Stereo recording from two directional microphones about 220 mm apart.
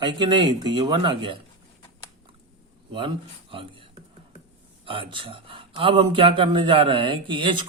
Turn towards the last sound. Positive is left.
turn(degrees=-20)  # may be behind; listen again after turning